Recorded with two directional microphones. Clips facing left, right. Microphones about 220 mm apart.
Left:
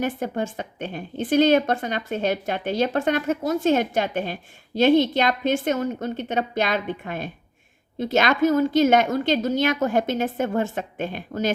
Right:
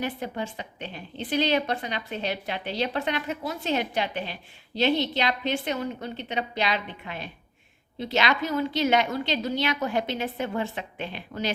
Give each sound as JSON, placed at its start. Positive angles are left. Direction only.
{"t": 0.0, "sound": "a woman's voice", "side_deg": 45}